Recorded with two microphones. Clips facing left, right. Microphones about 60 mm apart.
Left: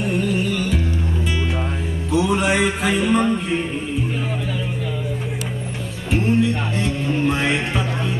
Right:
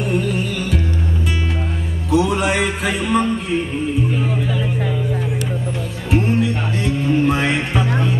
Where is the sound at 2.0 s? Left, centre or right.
Centre.